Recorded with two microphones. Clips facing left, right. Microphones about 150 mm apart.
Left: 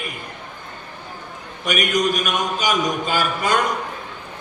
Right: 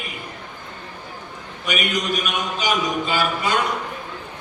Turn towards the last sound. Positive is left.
turn(degrees=45)  # may be behind; listen again after turning